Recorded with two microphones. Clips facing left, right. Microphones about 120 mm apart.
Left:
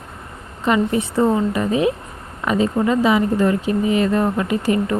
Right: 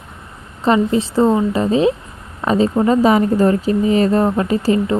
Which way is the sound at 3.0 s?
40° right (ahead or behind).